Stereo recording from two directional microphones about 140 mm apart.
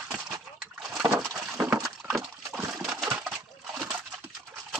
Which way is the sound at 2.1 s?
5° right (ahead or behind).